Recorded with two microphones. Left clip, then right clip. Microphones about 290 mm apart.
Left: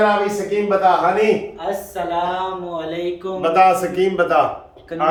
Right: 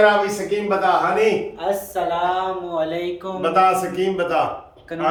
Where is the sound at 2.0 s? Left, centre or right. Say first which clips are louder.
Right 3 dB; right.